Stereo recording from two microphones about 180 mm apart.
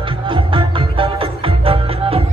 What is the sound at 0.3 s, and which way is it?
Music, 30° right (ahead or behind).